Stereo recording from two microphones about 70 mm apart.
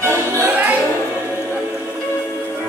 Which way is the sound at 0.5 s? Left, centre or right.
Right.